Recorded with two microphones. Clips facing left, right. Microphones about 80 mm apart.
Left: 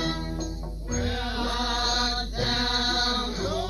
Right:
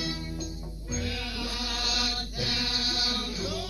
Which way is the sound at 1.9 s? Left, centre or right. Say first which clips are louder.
Left 5 dB; left.